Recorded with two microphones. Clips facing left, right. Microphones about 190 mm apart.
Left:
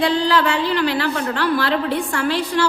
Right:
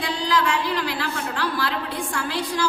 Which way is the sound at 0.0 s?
65° left (ahead or behind).